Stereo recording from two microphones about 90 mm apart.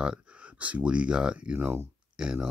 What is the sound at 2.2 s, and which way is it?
Speech, 10° right (ahead or behind).